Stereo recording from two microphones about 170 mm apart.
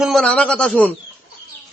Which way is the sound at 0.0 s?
Centre (ahead or behind).